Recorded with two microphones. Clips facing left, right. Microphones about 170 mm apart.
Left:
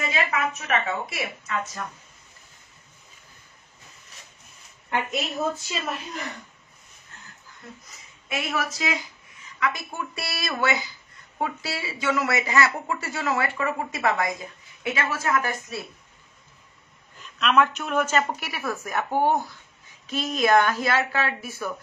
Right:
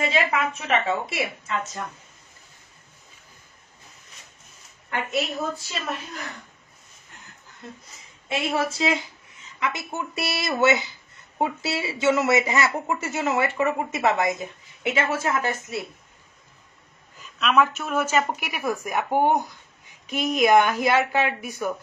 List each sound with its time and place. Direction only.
0.0 s speech: 30° right (ahead or behind)
5.5 s a woman's voice: centre (ahead or behind)
8.3 s a woman's voice: 30° right (ahead or behind)
17.2 s a woman's voice: 5° right (ahead or behind)